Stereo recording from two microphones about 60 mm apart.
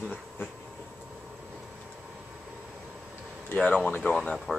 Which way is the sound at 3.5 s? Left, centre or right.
Left.